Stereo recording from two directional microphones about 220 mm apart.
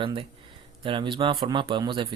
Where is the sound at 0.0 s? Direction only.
25° right (ahead or behind).